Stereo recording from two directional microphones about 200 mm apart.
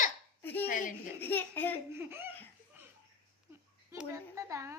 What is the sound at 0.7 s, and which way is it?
Speech, 40° left (ahead or behind).